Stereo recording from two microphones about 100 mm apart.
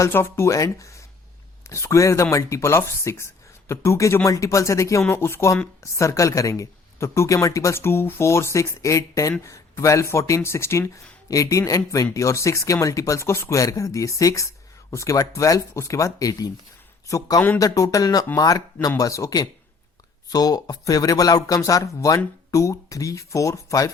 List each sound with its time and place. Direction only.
0.0 s speech: 25° left (ahead or behind)